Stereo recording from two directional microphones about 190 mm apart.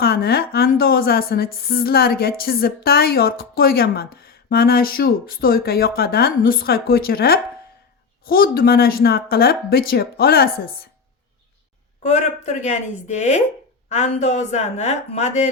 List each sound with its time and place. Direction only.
0.0 s a woman's voice: 55° left (ahead or behind)
12.0 s speech: 35° left (ahead or behind)